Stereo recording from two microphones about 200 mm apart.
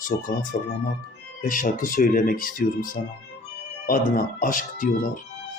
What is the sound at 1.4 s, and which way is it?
Speech, 45° left (ahead or behind).